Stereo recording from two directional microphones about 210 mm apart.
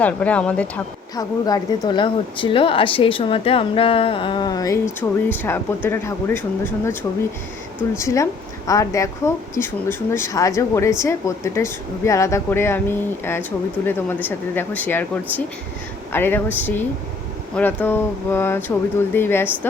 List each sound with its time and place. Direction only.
0.0 s speech: 5° left (ahead or behind)
1.1 s a woman's voice: 20° left (ahead or behind)
7.9 s speech: 15° left (ahead or behind)